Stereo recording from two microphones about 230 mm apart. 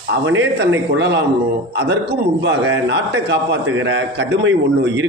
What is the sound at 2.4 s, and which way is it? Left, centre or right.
Speech, right.